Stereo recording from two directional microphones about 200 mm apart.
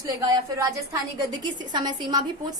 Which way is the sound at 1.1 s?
20° right (ahead or behind).